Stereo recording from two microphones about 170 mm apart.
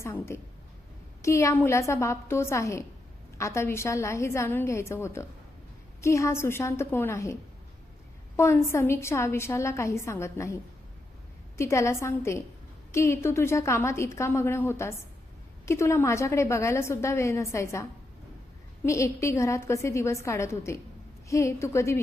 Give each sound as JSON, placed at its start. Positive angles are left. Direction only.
{"t": 0.0, "sound": "a woman's voice", "side_deg": 15}
{"t": 8.4, "sound": "a woman's voice", "side_deg": 15}
{"t": 18.9, "sound": "a woman's voice", "side_deg": 15}